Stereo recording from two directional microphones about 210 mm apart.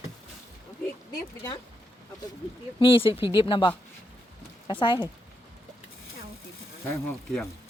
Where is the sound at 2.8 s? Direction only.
25° left (ahead or behind).